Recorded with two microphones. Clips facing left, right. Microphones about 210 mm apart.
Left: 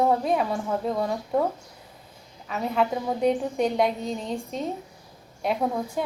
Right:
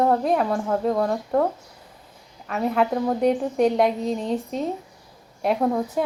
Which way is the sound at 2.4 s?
Centre (ahead or behind).